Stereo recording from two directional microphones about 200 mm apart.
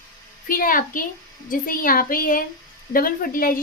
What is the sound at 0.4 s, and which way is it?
A child's voice, 45° left (ahead or behind).